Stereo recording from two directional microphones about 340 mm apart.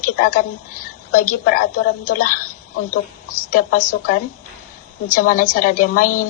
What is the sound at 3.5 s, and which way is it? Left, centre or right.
A woman's voice, left.